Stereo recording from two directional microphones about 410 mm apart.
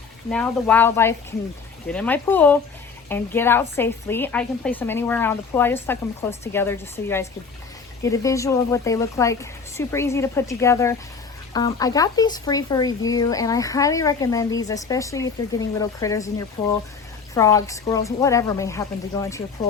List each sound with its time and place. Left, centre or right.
0.3 s a woman's voice: centre